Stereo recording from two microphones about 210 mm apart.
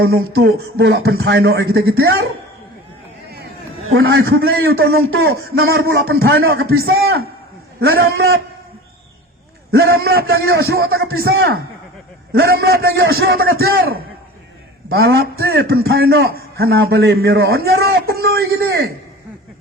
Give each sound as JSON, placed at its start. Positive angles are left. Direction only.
{"t": 0.0, "sound": "a man's voice", "side_deg": -65}
{"t": 0.4, "sound": "a man's voice", "side_deg": -50}
{"t": 3.2, "sound": "a sound", "side_deg": -50}
{"t": 3.8, "sound": "a man's voice", "side_deg": -70}
{"t": 4.3, "sound": "a man's voice", "side_deg": -45}
{"t": 6.8, "sound": "a man's voice", "side_deg": -70}
{"t": 7.8, "sound": "a man's voice", "side_deg": -50}
{"t": 9.7, "sound": "a man's voice", "side_deg": -45}